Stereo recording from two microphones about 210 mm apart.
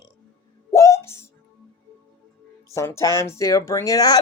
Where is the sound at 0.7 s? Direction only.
15° left (ahead or behind).